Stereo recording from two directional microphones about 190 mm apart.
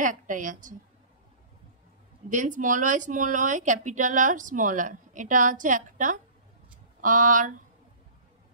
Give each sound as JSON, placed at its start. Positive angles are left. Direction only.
{"t": 0.0, "sound": "speech", "side_deg": -45}
{"t": 2.2, "sound": "speech", "side_deg": -40}